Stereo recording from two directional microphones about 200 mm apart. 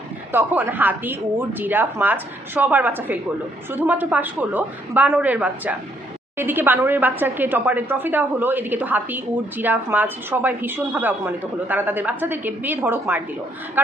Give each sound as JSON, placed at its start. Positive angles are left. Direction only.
{"t": 0.3, "sound": "speech", "side_deg": -10}